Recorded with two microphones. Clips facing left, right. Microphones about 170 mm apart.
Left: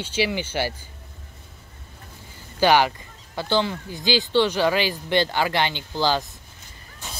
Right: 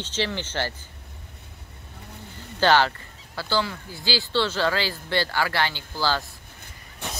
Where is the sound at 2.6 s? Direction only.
15° left (ahead or behind).